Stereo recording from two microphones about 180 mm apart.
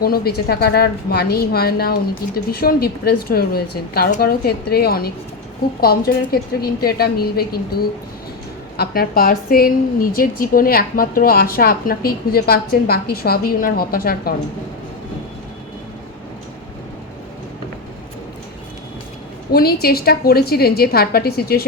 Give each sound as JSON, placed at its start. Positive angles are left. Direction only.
{"t": 0.0, "sound": "a woman's voice", "side_deg": 60}
{"t": 19.5, "sound": "a woman's voice", "side_deg": 55}